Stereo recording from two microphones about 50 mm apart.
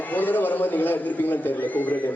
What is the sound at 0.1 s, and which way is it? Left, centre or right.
A man's voice, left.